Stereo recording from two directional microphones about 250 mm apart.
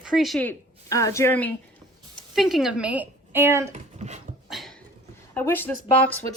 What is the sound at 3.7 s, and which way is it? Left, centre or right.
Dog, right.